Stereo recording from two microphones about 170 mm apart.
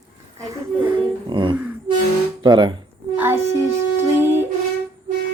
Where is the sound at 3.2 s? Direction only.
15° right (ahead or behind).